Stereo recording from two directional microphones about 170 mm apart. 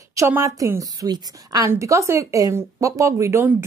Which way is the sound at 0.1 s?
15° right (ahead or behind).